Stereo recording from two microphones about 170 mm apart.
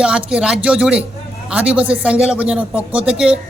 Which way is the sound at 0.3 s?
5° right (ahead or behind).